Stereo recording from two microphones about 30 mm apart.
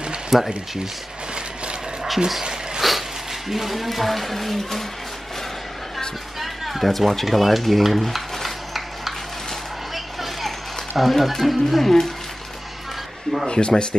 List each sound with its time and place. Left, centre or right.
0.3 s speech: centre
2.1 s speech: centre
2.8 s a sound: centre
3.4 s speech: centre
6.4 s a sound: centre
6.9 s speech: centre
9.9 s vehicle: centre
11.0 s speech: centre
13.5 s speech: left